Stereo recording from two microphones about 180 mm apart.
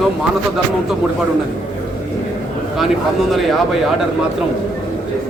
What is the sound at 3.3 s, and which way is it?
Speech, centre (ahead or behind).